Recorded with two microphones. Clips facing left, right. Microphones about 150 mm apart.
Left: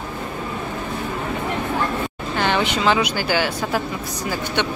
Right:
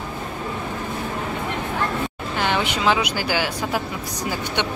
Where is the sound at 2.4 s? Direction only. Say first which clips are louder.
Left 2 dB; 10° right (ahead or behind).